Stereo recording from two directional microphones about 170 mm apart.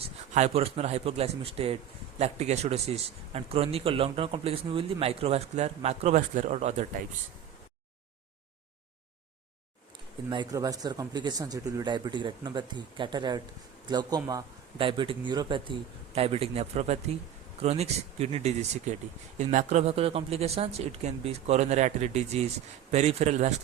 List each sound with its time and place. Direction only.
0.0 s a man's voice: 40° right (ahead or behind)
10.2 s a man's voice: 25° right (ahead or behind); by 23.6 s 40° right (ahead or behind)